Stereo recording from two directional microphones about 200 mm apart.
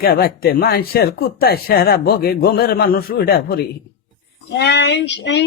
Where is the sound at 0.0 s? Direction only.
50° left (ahead or behind).